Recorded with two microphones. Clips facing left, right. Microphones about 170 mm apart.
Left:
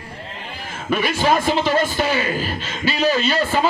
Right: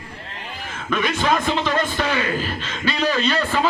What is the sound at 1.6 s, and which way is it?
Speech, 30° left (ahead or behind).